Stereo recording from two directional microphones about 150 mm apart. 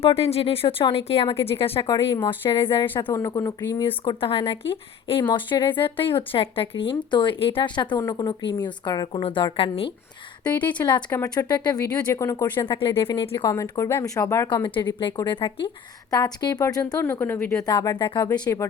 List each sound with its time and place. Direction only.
0.0 s speech: 40° left (ahead or behind)
3.1 s speech: 20° left (ahead or behind); by 9.9 s 40° left (ahead or behind)
10.5 s speech: 10° left (ahead or behind)
11.1 s speech: 20° left (ahead or behind)
12.6 s speech: 35° left (ahead or behind)
13.5 s speech: 20° left (ahead or behind)
14.5 s speech: 30° left (ahead or behind); by 17.7 s 15° left (ahead or behind)
17.7 s speech: 30° left (ahead or behind)